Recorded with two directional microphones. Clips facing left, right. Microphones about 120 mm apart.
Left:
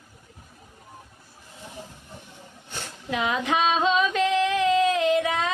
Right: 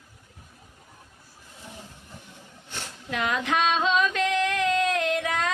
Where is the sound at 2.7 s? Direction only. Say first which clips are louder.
Left 3 dB; centre (ahead or behind).